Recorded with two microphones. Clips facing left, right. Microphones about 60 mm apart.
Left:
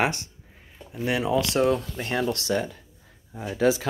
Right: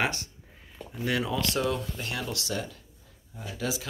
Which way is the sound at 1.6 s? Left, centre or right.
Left.